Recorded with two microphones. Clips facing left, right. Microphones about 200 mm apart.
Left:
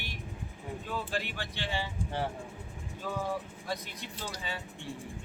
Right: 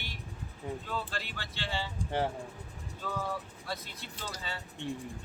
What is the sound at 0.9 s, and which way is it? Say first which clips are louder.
Speech: left 2 dB; 15° left (ahead or behind).